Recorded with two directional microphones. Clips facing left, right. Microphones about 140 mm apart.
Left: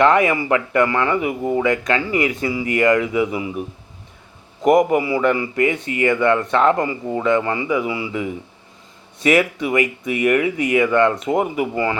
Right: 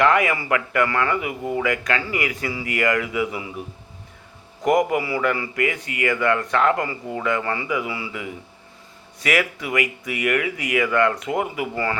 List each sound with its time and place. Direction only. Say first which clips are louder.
0.0 s a man's voice: left 4 dB; 25° left (ahead or behind)
1.1 s speech: left 5 dB; 35° left (ahead or behind)
1.5 s a man's voice: left 3 dB; 25° left (ahead or behind)
4.6 s a man's voice: left 5 dB; 25° left (ahead or behind)